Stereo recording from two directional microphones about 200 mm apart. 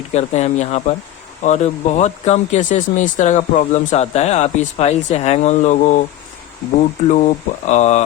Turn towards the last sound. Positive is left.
turn(degrees=35)  # may be behind; listen again after turning